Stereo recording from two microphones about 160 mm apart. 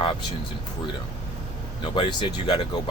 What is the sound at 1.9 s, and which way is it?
Speech, 30° left (ahead or behind).